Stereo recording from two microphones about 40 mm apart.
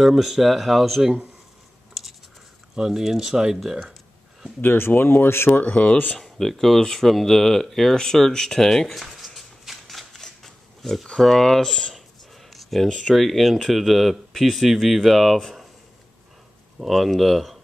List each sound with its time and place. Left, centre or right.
0.0 s speech: centre
2.7 s speech: centre
4.6 s speech: left
5.6 s speech: left
6.1 s speech: centre
8.8 s shuffling cards: centre
11.1 s speech: centre
12.4 s a sound: centre
13.1 s speech: centre
16.8 s speech: centre